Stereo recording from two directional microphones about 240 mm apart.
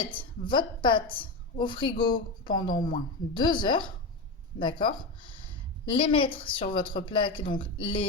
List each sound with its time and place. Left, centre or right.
0.0 s speech: centre